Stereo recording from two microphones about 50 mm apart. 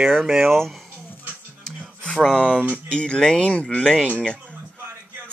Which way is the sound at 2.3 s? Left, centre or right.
Left.